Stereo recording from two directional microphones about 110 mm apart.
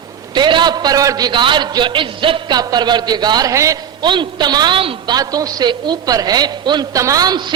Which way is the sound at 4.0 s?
45° right (ahead or behind).